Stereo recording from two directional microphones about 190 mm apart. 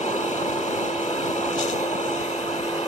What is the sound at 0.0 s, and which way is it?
Vehicle, 40° left (ahead or behind).